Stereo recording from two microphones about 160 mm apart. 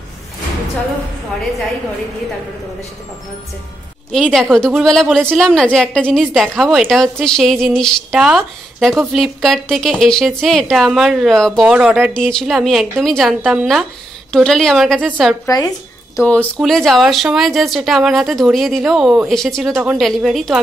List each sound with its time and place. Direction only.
4.1 s a woman's voice: centre (ahead or behind)
15.0 s a woman's voice: 10° right (ahead or behind)
15.4 s speech: 20° left (ahead or behind)
16.3 s a woman's voice: 5° left (ahead or behind)